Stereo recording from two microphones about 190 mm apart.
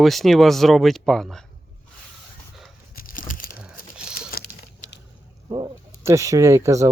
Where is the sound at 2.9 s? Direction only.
50° left (ahead or behind).